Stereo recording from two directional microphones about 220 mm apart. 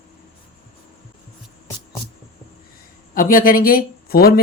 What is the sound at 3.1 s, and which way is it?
Speech, 40° left (ahead or behind).